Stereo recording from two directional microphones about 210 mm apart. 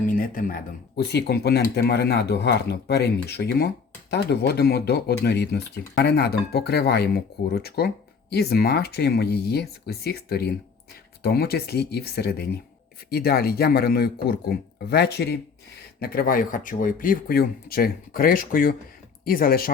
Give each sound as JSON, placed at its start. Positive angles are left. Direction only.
{"t": 0.0, "sound": "speech", "side_deg": 40}